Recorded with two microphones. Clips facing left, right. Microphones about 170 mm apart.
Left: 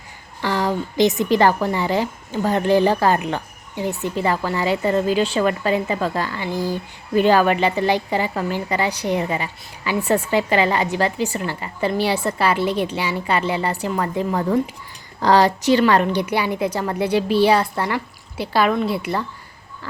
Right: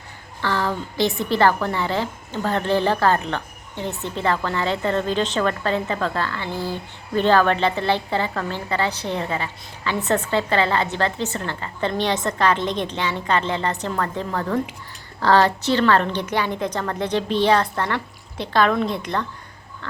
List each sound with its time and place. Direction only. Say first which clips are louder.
0.4 s a woman's voice: left 3 dB; 15° left (ahead or behind)